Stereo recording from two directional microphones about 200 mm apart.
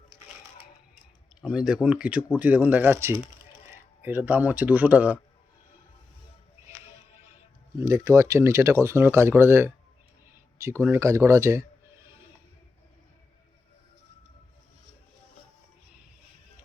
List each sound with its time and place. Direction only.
1.4 s speech: 5° right (ahead or behind)
7.8 s speech: 15° right (ahead or behind)